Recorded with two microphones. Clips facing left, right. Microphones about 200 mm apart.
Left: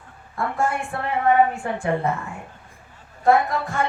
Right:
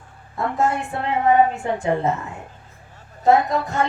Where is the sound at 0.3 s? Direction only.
20° right (ahead or behind).